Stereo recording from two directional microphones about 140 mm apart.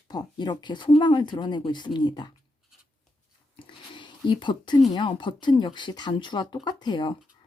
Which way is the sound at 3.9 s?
35° left (ahead or behind).